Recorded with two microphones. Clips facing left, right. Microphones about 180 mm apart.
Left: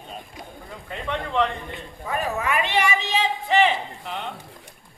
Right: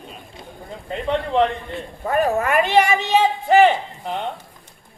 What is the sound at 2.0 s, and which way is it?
A man's voice, 50° right (ahead or behind).